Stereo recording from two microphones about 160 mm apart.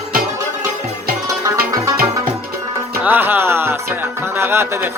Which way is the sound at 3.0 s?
10° right (ahead or behind).